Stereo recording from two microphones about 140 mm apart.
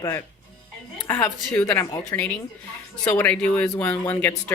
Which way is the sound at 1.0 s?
15° left (ahead or behind).